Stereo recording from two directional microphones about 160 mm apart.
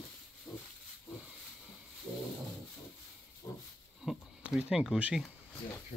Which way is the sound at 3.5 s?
20° left (ahead or behind).